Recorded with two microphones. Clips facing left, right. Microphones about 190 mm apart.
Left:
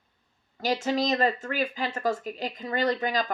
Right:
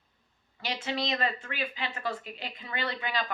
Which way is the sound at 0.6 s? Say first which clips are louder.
Left 7 dB; 40° left (ahead or behind).